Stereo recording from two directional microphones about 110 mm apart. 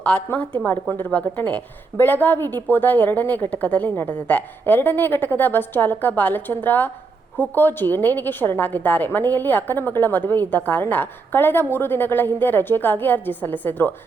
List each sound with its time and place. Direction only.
0.0 s a woman's voice: 15° left (ahead or behind)